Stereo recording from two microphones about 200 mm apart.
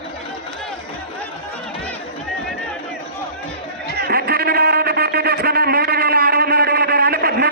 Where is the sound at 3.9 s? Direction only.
50° right (ahead or behind).